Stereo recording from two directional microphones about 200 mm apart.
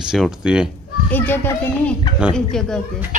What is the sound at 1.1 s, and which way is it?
Speech, 10° left (ahead or behind).